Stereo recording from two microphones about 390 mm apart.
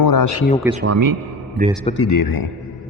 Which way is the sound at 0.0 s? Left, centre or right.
Left.